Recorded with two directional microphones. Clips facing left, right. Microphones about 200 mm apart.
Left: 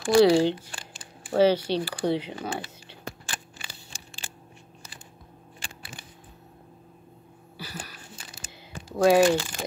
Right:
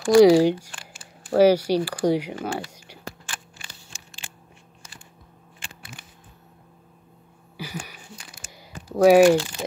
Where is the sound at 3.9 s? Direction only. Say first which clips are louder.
Left 1 dB; 35° left (ahead or behind).